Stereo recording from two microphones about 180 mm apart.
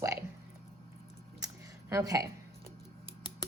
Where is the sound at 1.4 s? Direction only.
15° right (ahead or behind).